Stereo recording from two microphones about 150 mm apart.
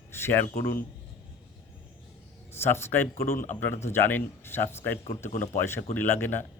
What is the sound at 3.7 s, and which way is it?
Speech, 15° left (ahead or behind).